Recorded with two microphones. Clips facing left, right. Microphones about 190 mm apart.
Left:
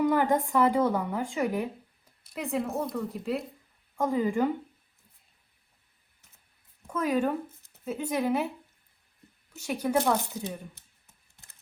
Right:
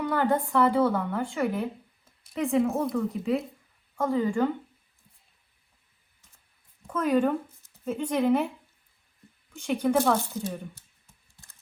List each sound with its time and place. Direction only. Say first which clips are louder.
0.0 s speech: left 1 dB; 15° left (ahead or behind)
2.3 s speech: right 6 dB; 5° left (ahead or behind)
3.9 s speech: right 1 dB; 15° left (ahead or behind)
6.8 s speech: right 3 dB; 10° left (ahead or behind)
9.5 s speech: right 3 dB; 5° left (ahead or behind)
10.8 s typing: right 3 dB; 20° left (ahead or behind)